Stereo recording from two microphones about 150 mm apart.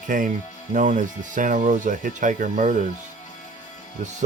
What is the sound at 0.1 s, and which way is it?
Speech, 60° right (ahead or behind).